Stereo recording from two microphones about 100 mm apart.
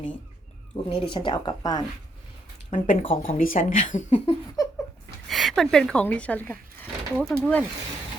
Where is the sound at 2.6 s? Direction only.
70° left (ahead or behind).